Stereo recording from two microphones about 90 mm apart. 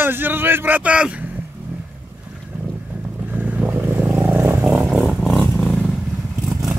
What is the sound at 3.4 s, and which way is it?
Boat, 20° right (ahead or behind).